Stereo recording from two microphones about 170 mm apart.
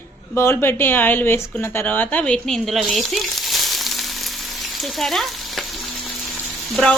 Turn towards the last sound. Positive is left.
turn(degrees=5)  # may be behind; listen again after turning